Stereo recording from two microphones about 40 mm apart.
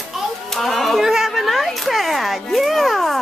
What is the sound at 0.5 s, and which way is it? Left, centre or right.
Children playing, centre.